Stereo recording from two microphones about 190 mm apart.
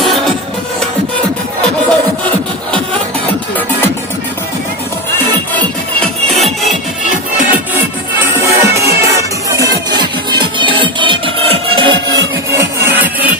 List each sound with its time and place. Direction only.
0.0 s music: centre (ahead or behind)
6.4 s music: centre (ahead or behind)
8.2 s music: 15° right (ahead or behind)
12.1 s music: 15° right (ahead or behind)